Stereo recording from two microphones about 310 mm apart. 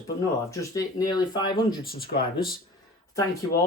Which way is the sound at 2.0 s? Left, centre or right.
Left.